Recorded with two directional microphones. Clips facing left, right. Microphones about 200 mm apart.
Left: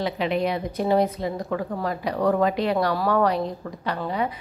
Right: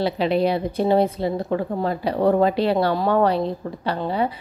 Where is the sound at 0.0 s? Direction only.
30° right (ahead or behind).